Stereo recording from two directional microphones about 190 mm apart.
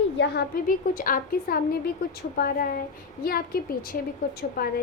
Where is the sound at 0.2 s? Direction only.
55° left (ahead or behind).